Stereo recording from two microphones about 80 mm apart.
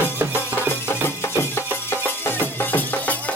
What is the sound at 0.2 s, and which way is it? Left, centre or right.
Music, right.